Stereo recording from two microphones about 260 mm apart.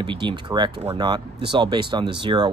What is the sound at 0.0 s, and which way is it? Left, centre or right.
Speech, centre.